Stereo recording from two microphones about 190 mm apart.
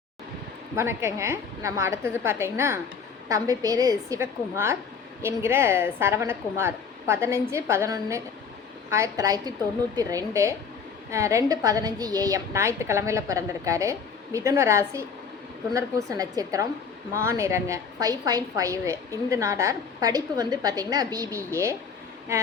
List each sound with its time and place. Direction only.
0.8 s a woman's voice: 15° right (ahead or behind)